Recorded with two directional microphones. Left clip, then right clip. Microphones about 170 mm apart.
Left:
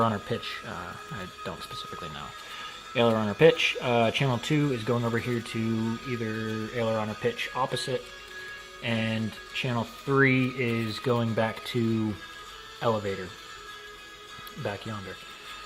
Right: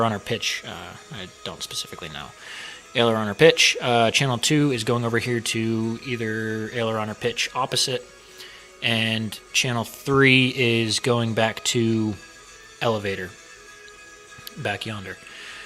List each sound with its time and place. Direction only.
0.0 s speech: 20° right (ahead or behind)
14.6 s speech: 30° right (ahead or behind)